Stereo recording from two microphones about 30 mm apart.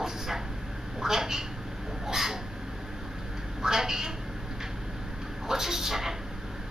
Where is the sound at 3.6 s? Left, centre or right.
Centre.